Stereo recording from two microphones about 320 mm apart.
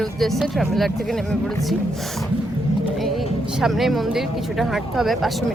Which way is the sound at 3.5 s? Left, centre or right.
Centre.